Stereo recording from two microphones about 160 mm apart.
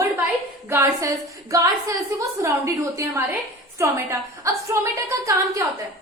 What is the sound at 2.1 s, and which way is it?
A woman's voice, 20° right (ahead or behind).